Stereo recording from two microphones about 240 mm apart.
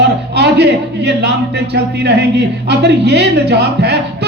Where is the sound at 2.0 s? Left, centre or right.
Right.